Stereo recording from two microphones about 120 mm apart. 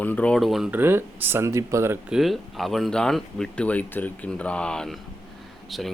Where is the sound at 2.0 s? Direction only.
5° right (ahead or behind).